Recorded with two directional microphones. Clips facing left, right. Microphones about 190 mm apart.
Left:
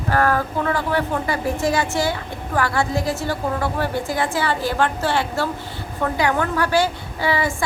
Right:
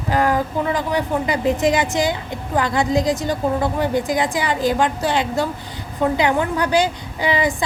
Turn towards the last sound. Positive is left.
turn(degrees=-15)  # may be behind; listen again after turning